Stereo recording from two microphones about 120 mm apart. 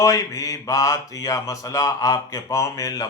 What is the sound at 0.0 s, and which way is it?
Mantra, 30° left (ahead or behind).